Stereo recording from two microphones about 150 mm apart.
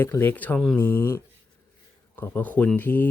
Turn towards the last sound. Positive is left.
turn(degrees=10)  # may be behind; listen again after turning